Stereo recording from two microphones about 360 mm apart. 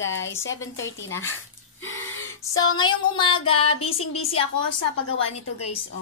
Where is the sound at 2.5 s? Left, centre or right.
Centre.